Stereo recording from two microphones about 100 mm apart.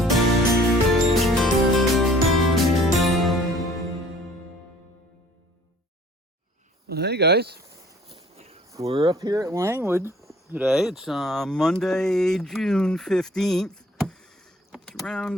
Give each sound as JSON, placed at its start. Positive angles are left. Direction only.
{"t": 0.0, "sound": "music", "side_deg": 0}
{"t": 8.1, "sound": "walk", "side_deg": -85}
{"t": 8.8, "sound": "speech", "side_deg": -80}
{"t": 9.0, "sound": "speech", "side_deg": -35}
{"t": 10.6, "sound": "speech", "side_deg": -5}